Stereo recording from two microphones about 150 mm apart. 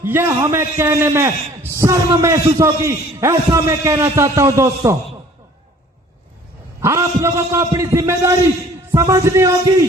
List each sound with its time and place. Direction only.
0.0 s a man's voice: 15° right (ahead or behind)
6.8 s a man's voice: 20° right (ahead or behind)